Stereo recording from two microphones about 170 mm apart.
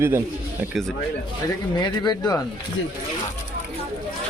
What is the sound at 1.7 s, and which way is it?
Speech, 25° left (ahead or behind).